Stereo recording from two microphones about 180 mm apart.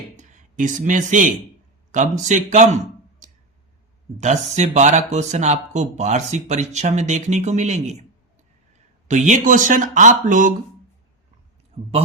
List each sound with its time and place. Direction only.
0.2 s speech: 45° right (ahead or behind)
3.2 s clicking: 40° right (ahead or behind)
4.2 s speech: 40° right (ahead or behind)
9.0 s speech: 40° right (ahead or behind)
11.7 s a man's voice: 35° right (ahead or behind)